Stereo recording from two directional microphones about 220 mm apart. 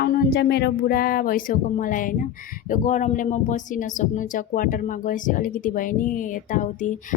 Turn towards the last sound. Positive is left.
turn(degrees=35)  # may be behind; listen again after turning